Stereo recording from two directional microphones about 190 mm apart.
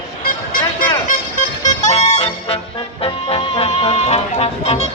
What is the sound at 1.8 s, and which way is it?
Music, 35° left (ahead or behind).